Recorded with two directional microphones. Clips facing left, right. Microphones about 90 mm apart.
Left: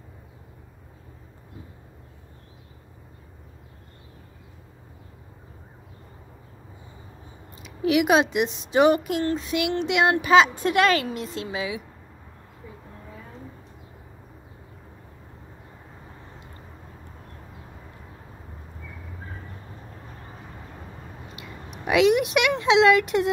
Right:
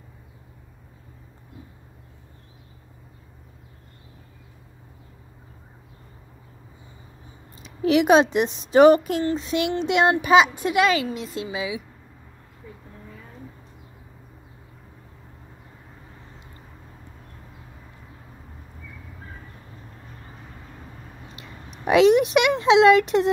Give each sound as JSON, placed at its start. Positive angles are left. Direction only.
{"t": 7.6, "sound": "speech", "side_deg": -35}
{"t": 9.2, "sound": "speech", "side_deg": -25}
{"t": 10.6, "sound": "a woman's voice", "side_deg": -5}
{"t": 21.4, "sound": "a sound", "side_deg": -30}